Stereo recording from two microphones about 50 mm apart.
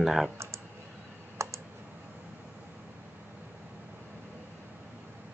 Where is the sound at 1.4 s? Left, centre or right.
Right.